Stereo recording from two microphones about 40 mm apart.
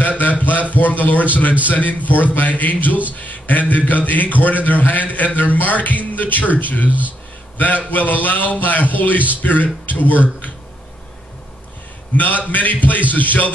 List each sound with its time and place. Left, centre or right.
0.2 s a sound: left
1.7 s a man's voice: left
6.9 s speech: right
7.5 s a man's voice: left
12.2 s a man's voice: left